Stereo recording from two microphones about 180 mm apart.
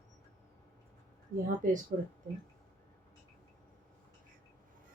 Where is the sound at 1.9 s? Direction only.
45° right (ahead or behind).